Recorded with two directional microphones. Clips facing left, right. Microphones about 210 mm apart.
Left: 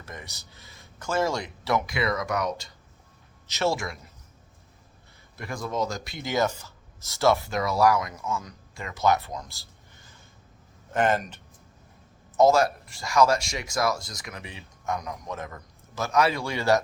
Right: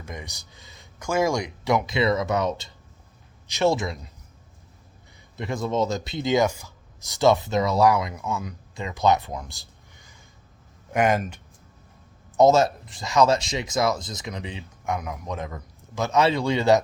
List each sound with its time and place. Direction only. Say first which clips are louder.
0.0 s speech: right 4 dB; 15° right (ahead or behind)
5.4 s speech: right 5 dB; 20° right (ahead or behind)
10.9 s speech: right 2 dB; 10° right (ahead or behind)
12.4 s speech: right 2 dB; 20° right (ahead or behind)